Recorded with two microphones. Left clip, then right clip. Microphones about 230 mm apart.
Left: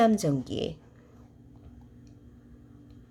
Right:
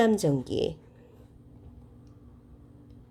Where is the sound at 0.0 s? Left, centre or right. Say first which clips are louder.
Even; centre.